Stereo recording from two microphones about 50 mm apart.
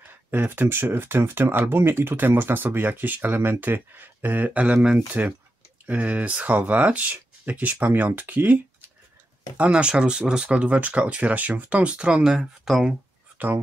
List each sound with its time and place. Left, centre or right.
0.3 s speech: right
3.3 s speech: right
3.6 s speech: right
9.7 s speech: centre
10.6 s speech: right